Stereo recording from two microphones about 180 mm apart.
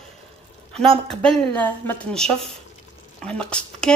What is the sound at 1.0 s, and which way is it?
Speech, 5° left (ahead or behind).